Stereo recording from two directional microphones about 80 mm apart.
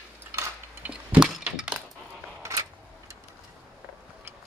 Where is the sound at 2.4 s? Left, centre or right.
Right.